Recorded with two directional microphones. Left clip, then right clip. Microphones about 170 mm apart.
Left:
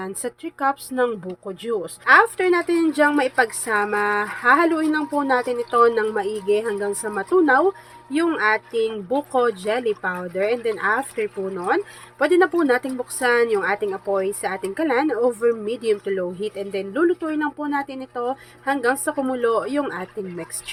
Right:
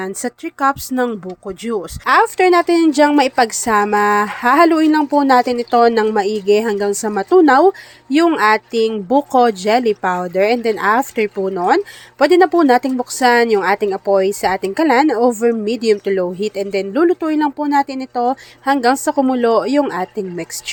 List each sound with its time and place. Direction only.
0.0 s a woman's voice: 30° right (ahead or behind)
2.0 s a woman's voice: 40° right (ahead or behind)